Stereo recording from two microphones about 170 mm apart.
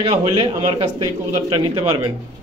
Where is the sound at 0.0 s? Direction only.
35° right (ahead or behind).